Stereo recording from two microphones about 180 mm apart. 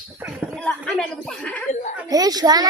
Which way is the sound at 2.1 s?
20° right (ahead or behind).